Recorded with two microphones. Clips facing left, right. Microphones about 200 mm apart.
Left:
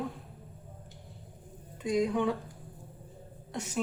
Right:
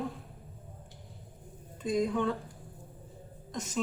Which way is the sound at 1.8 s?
15° left (ahead or behind).